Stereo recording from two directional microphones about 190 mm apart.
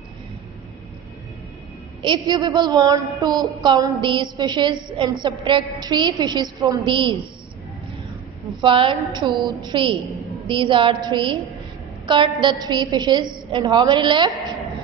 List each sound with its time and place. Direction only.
2.0 s a woman's voice: 25° right (ahead or behind)
8.5 s a woman's voice: 25° right (ahead or behind)